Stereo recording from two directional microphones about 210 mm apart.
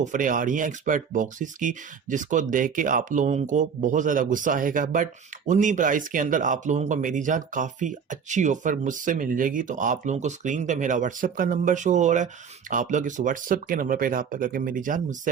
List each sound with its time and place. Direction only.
0.0 s speech: 40° right (ahead or behind)